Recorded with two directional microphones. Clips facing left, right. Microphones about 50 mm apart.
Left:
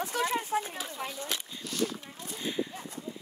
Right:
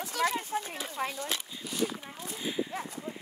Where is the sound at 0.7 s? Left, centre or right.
Right.